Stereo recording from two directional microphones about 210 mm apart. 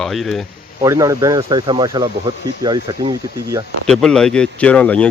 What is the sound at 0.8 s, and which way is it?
Speech, 15° right (ahead or behind).